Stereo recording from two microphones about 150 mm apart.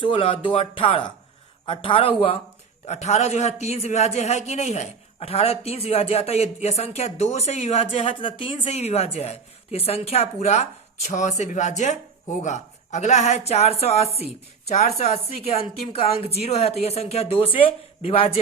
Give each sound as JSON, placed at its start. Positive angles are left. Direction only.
{"t": 0.0, "sound": "speech", "side_deg": 35}
{"t": 2.8, "sound": "a man's voice", "side_deg": 50}